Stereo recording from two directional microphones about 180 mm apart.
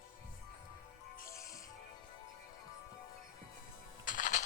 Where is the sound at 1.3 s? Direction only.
15° left (ahead or behind).